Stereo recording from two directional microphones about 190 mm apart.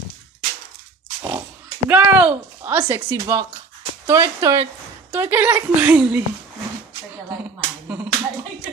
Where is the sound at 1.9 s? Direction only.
10° right (ahead or behind).